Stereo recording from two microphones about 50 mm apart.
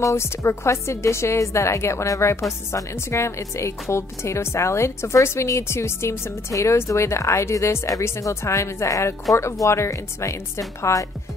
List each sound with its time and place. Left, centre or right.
0.0 s a woman's voice: left